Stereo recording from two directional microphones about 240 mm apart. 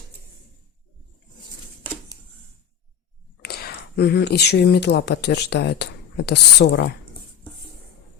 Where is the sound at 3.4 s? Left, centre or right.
Left.